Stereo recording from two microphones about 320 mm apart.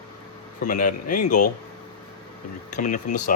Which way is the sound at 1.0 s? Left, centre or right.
Left.